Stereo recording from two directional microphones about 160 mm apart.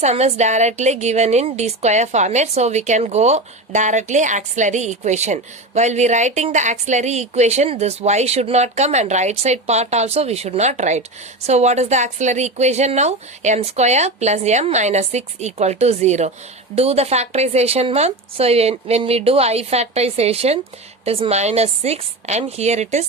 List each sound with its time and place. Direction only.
0.0 s a woman's voice: 45° right (ahead or behind)